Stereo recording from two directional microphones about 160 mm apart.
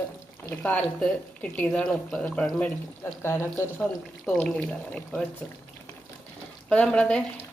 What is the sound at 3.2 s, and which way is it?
Speech, 15° left (ahead or behind).